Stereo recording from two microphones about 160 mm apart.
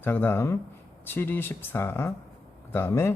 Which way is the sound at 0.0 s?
10° left (ahead or behind).